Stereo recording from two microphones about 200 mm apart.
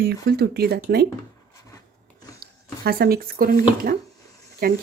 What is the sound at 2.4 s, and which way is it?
Speech, 50° right (ahead or behind).